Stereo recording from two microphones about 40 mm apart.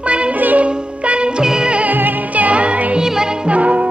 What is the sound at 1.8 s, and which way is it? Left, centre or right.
Music, right.